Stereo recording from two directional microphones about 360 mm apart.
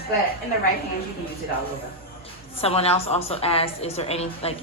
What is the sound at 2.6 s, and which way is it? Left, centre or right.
A woman's voice, centre.